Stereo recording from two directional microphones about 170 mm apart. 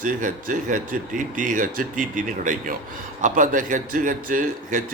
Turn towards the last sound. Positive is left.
turn(degrees=-50)  # may be behind; listen again after turning